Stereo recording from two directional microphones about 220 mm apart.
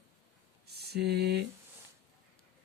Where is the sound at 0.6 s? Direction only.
45° right (ahead or behind).